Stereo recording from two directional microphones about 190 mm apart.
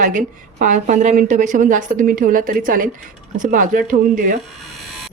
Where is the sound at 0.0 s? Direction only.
40° right (ahead or behind).